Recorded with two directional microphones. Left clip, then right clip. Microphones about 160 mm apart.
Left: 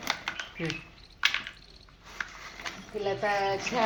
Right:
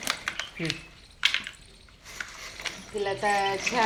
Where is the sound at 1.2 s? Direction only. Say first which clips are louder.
Right 2 dB; centre (ahead or behind).